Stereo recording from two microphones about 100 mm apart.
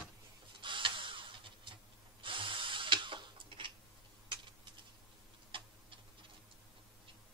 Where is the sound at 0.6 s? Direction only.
55° right (ahead or behind).